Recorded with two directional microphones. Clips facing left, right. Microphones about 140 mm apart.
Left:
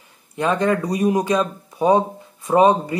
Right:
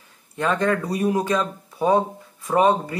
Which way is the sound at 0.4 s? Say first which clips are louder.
Left 2 dB; 15° left (ahead or behind).